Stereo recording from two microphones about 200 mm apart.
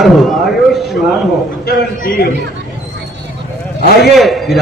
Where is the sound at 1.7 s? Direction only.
50° left (ahead or behind).